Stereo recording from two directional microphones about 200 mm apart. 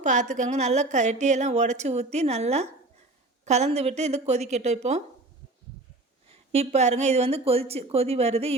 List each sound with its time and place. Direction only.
0.0 s a woman's voice: 35° right (ahead or behind)
6.2 s a woman's voice: 30° right (ahead or behind)